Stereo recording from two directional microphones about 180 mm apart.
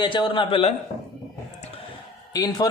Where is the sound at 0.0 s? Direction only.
25° left (ahead or behind).